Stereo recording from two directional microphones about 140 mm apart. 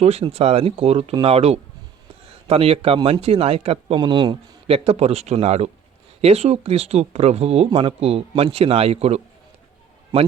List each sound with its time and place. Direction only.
0.0 s a man's voice: 50° right (ahead or behind)
3.9 s a man's voice: 30° right (ahead or behind); by 9.2 s 45° right (ahead or behind)